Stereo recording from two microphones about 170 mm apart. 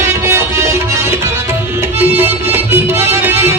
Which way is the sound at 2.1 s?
10° right (ahead or behind).